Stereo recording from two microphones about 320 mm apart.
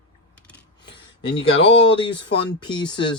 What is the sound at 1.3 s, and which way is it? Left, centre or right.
Speech, centre.